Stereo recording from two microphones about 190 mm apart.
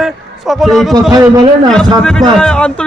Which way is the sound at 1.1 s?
20° right (ahead or behind).